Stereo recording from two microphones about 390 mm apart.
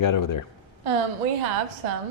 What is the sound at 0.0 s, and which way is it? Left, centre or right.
Speech, left.